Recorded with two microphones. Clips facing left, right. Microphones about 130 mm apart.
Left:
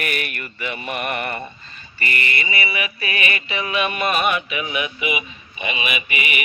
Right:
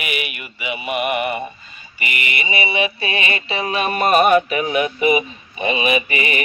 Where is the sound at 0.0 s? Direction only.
10° right (ahead or behind).